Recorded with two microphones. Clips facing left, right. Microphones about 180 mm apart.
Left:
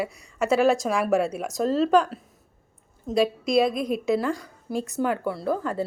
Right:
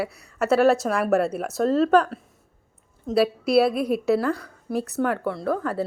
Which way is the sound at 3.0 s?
5° right (ahead or behind).